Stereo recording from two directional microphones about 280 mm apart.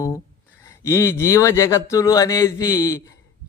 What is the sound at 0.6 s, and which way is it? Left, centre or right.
Speech, centre.